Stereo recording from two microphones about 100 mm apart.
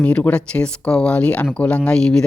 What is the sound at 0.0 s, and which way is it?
Speech, 15° left (ahead or behind).